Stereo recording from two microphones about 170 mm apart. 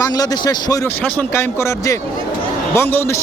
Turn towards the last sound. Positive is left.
turn(degrees=15)  # may be behind; listen again after turning